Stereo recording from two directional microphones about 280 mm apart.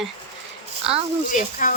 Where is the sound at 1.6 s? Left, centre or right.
Left.